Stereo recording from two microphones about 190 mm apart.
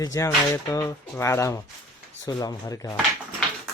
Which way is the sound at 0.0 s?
15° left (ahead or behind).